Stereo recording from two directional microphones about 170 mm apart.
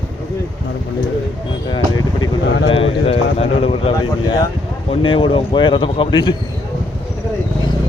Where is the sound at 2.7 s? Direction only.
35° left (ahead or behind).